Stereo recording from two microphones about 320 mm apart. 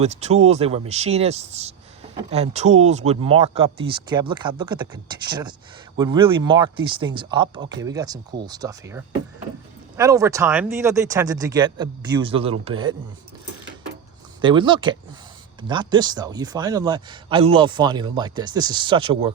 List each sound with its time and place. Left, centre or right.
0.0 s a man's voice: centre
14.4 s a man's voice: centre